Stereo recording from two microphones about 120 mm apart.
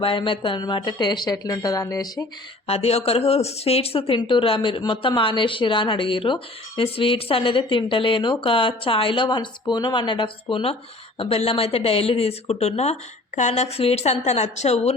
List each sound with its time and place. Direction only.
0.0 s speech: 45° left (ahead or behind); by 2.2 s 30° left (ahead or behind)
2.6 s speech: 60° left (ahead or behind)